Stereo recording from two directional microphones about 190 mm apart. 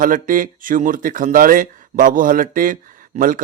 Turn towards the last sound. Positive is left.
turn(degrees=-45)  # may be behind; listen again after turning